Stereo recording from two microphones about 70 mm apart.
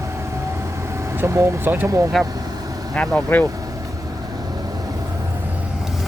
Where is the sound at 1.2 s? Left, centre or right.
Right.